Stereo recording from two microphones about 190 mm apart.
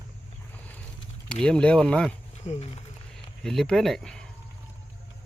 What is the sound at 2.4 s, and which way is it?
Speech, 35° left (ahead or behind).